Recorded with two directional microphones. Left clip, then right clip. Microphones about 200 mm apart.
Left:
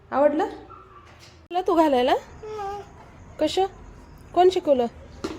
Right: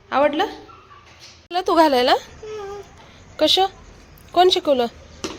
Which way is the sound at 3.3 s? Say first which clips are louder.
Right 6 dB; centre (ahead or behind).